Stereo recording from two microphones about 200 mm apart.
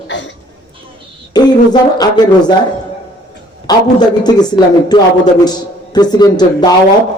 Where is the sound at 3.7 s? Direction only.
20° left (ahead or behind).